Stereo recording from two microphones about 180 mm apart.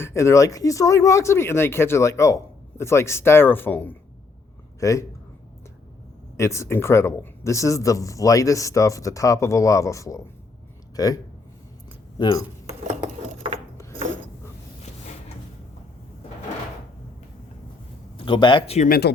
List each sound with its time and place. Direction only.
0.0 s speech: 15° left (ahead or behind)
6.3 s a man's voice: 15° left (ahead or behind)
18.3 s a man's voice: 25° left (ahead or behind)
18.9 s speech: 65° left (ahead or behind)